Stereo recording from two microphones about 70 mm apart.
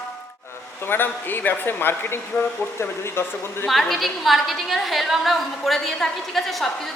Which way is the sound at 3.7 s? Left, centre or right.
Centre.